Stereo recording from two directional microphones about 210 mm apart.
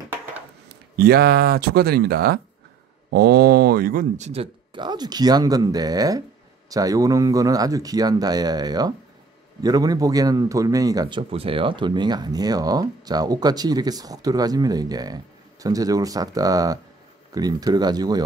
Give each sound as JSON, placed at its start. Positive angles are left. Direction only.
{"t": 0.9, "sound": "speech", "side_deg": -50}
{"t": 4.3, "sound": "a man's voice", "side_deg": -25}